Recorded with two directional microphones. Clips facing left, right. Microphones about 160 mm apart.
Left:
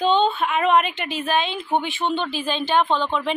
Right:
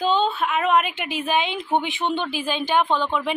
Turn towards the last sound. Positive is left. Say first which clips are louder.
# left 1 dB
turn(degrees=-10)  # may be behind; listen again after turning